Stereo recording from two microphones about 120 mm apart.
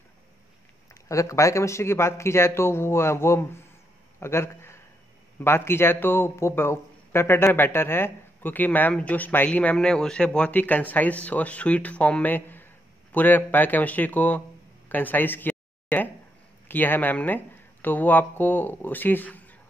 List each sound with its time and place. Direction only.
1.0 s a man's voice: 25° left (ahead or behind)
14.9 s a sound: 15° left (ahead or behind)
16.6 s a man's voice: 15° left (ahead or behind)